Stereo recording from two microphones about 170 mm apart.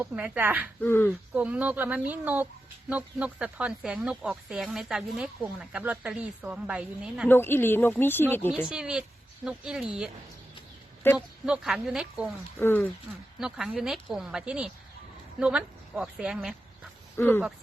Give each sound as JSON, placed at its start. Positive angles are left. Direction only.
{"t": 0.0, "sound": "speech", "side_deg": -10}
{"t": 0.8, "sound": "speech", "side_deg": 10}
{"t": 1.3, "sound": "speech", "side_deg": -5}
{"t": 7.3, "sound": "speech", "side_deg": 15}
{"t": 8.7, "sound": "a woman's voice", "side_deg": -5}
{"t": 11.4, "sound": "speech", "side_deg": -5}
{"t": 12.5, "sound": "speech", "side_deg": 15}
{"t": 13.4, "sound": "speech", "side_deg": -5}
{"t": 17.2, "sound": "speech", "side_deg": 10}